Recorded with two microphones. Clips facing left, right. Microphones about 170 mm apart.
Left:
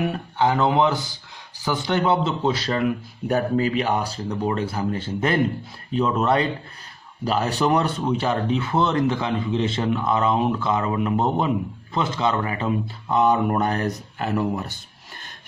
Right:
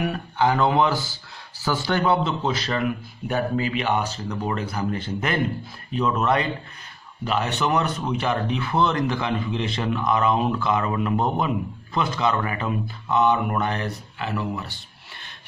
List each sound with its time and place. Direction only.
0.0 s speech: 25° left (ahead or behind); by 14.8 s 45° left (ahead or behind)